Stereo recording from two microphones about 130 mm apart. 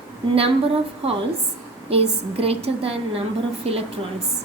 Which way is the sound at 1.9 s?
50° right (ahead or behind).